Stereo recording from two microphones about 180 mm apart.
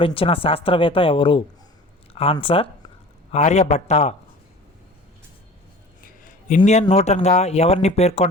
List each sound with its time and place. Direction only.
0.0 s speech: 30° left (ahead or behind)
6.0 s a sound: 50° left (ahead or behind)
6.9 s speech: 40° left (ahead or behind)